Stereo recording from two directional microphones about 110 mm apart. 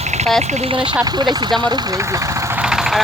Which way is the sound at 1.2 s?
45° right (ahead or behind).